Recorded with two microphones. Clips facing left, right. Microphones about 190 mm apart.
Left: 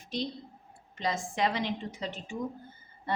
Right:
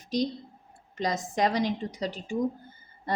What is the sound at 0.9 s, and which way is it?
A woman's voice, 40° right (ahead or behind).